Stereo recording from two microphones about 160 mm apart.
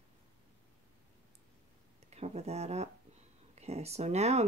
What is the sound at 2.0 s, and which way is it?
Speech, 40° right (ahead or behind).